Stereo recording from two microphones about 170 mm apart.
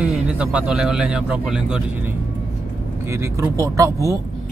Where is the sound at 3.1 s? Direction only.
15° right (ahead or behind).